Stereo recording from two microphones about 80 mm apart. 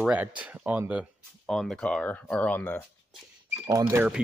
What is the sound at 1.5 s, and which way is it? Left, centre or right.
Speech, centre.